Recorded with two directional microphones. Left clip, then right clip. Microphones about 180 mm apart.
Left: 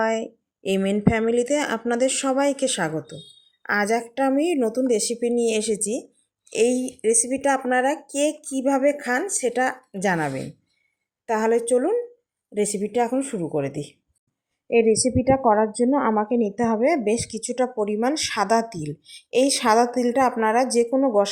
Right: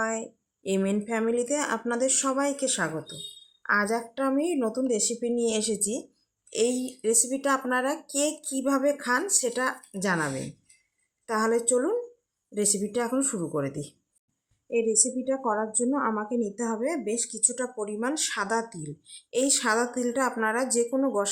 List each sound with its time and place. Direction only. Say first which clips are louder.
0.0 s a woman's voice: left 7 dB; 25° left (ahead or behind)
14.7 s a woman's voice: left 7 dB; 25° left (ahead or behind)